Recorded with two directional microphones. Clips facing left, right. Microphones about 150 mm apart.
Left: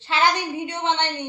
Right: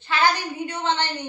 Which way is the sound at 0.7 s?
20° left (ahead or behind).